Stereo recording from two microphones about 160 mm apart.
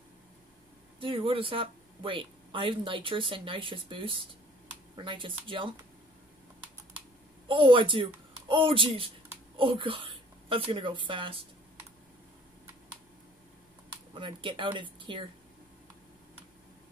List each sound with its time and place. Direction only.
0.9 s speech: 35° right (ahead or behind)
7.4 s a woman's voice: 35° right (ahead or behind)
14.2 s speech: 30° right (ahead or behind)